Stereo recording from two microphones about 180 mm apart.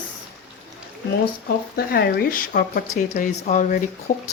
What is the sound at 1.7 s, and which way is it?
Speech, 55° left (ahead or behind).